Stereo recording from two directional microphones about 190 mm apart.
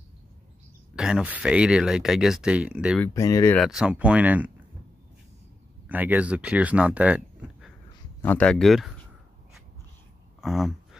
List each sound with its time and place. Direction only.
0.9 s speech: 5° right (ahead or behind)
3.0 s speech: 15° left (ahead or behind)
3.5 s speech: centre (ahead or behind)
5.9 s speech: 10° right (ahead or behind)
8.2 s speech: 10° left (ahead or behind)
10.4 s a sound: centre (ahead or behind)